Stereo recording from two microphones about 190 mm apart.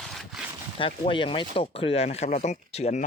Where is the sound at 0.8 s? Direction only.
25° left (ahead or behind).